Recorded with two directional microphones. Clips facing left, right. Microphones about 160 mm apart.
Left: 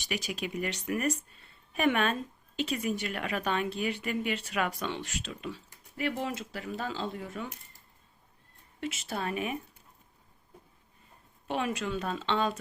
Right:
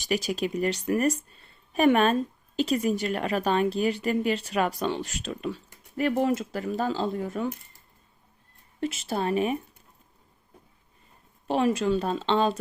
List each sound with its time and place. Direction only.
0.0 s speech: 40° right (ahead or behind)
8.8 s speech: 35° right (ahead or behind)
11.4 s speech: 35° right (ahead or behind)